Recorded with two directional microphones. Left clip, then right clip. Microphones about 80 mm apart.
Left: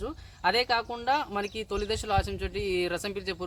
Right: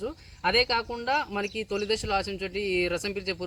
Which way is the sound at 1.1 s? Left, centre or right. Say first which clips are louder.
Right 1 dB; left.